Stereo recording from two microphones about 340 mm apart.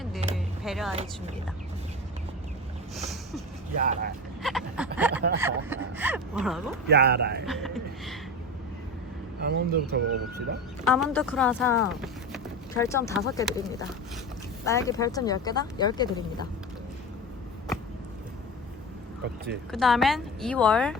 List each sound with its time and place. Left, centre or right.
0.3 s a sound: centre
2.9 s a sound: centre
3.8 s speech: right
4.4 s speech: centre
4.9 s a sound: centre
5.4 s speech: centre
6.9 s speech: right
7.4 s speech: centre
9.4 s speech: right
10.8 s speech: centre
19.7 s speech: centre